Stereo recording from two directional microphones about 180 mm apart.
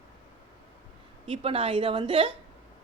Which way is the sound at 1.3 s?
30° right (ahead or behind).